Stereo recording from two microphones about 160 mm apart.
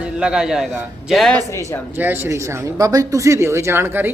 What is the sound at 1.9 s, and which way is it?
A man's voice, 15° right (ahead or behind).